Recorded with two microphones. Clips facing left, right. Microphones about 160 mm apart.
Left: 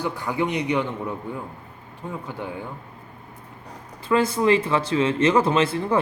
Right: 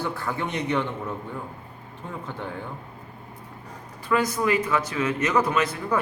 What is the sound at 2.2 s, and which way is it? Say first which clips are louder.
Speech: left 2 dB; 10° left (ahead or behind).